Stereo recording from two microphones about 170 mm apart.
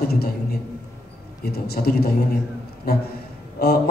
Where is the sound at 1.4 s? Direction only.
70° left (ahead or behind).